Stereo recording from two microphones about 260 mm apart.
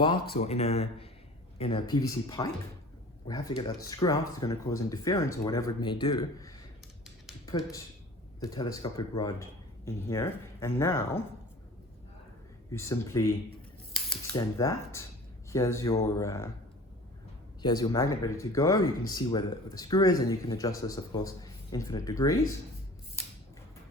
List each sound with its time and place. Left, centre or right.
0.0 s speech: centre
12.7 s speech: centre
14.3 s speech: centre
17.6 s speech: centre